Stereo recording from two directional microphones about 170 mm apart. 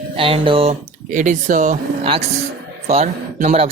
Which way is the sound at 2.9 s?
40° right (ahead or behind).